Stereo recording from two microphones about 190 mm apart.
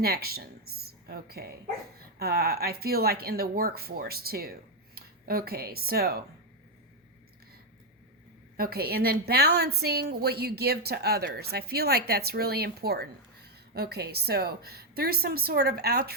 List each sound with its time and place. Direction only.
0.0 s a woman's voice: 55° right (ahead or behind)
8.5 s a woman's voice: 55° right (ahead or behind)